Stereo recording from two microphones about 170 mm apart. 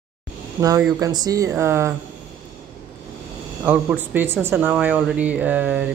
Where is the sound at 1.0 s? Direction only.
20° right (ahead or behind).